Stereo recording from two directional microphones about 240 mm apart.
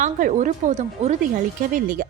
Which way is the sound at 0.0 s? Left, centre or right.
Right.